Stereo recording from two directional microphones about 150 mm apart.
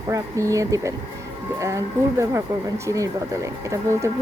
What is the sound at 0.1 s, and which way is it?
Speech, 20° right (ahead or behind).